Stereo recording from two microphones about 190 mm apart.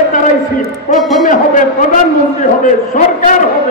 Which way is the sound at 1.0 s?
Centre (ahead or behind).